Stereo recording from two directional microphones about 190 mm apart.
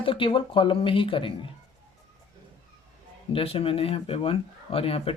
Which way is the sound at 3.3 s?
30° left (ahead or behind).